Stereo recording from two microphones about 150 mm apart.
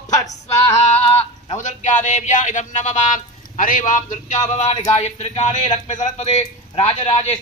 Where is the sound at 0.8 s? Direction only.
45° left (ahead or behind).